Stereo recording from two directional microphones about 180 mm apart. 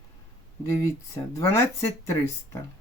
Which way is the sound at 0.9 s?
15° left (ahead or behind).